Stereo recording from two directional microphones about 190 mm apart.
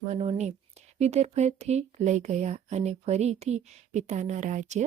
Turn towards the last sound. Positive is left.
turn(degrees=-40)  # may be behind; listen again after turning